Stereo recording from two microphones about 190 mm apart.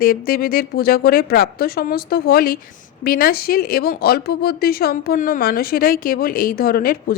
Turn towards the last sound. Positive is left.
turn(degrees=50)  # may be behind; listen again after turning